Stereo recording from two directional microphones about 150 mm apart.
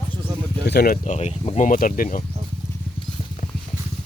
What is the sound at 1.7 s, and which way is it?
Speech, 65° left (ahead or behind).